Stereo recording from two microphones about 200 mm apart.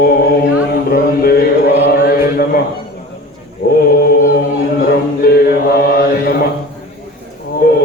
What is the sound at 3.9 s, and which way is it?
Chant, 45° left (ahead or behind).